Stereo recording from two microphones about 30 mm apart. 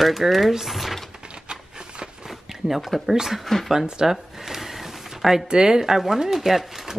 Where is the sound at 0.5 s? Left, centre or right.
Centre.